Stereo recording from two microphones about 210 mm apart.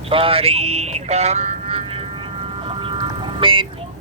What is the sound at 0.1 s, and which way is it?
Speech, 25° right (ahead or behind).